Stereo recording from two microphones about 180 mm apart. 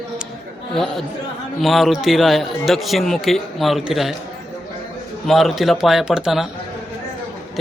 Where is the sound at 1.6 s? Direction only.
Centre (ahead or behind).